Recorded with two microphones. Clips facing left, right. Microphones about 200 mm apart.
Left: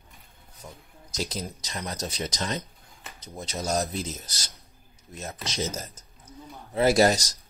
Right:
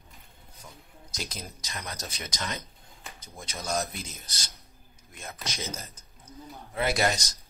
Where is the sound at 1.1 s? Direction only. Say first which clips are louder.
Left 7 dB; 30° left (ahead or behind).